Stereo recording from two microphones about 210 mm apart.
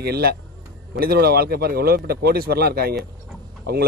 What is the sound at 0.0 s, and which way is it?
Speech, 50° right (ahead or behind).